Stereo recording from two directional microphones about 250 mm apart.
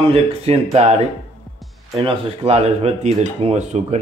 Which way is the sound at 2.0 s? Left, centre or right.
Right.